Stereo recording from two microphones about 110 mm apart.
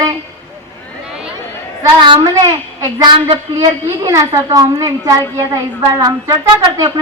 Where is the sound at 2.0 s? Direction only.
40° right (ahead or behind).